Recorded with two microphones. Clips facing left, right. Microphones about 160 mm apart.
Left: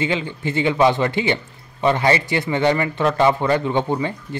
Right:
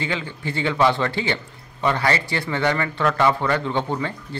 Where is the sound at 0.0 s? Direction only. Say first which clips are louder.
Left 5 dB; 20° left (ahead or behind).